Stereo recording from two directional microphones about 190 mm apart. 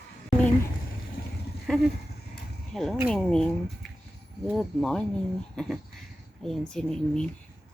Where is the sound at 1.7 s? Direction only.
Centre (ahead or behind).